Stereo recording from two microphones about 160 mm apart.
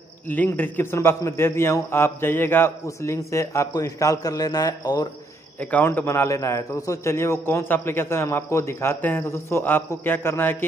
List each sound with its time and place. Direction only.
0.3 s a man's voice: 10° left (ahead or behind)
5.6 s a man's voice: 10° left (ahead or behind)